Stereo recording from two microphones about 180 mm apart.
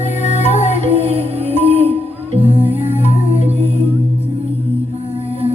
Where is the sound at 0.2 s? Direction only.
40° left (ahead or behind).